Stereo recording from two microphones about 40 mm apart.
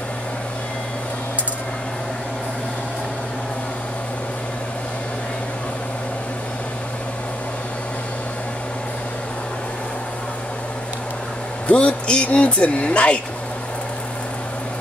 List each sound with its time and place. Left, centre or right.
11.6 s speech: left